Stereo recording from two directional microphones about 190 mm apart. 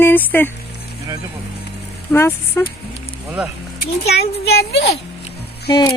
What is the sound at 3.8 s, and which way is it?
Speech, 60° left (ahead or behind).